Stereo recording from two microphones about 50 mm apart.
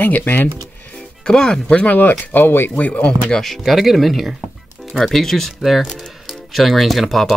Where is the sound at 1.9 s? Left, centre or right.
Left.